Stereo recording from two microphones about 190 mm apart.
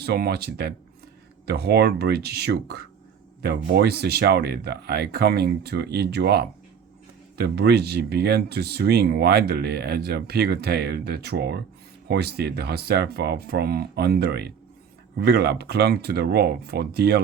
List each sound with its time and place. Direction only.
0.0 s speech: 55° right (ahead or behind)